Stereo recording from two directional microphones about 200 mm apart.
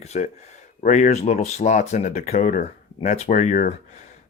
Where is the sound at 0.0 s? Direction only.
35° left (ahead or behind).